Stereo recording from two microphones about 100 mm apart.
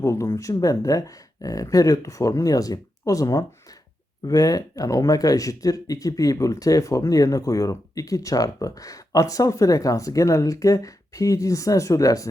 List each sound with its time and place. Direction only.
0.0 s speech: 30° left (ahead or behind)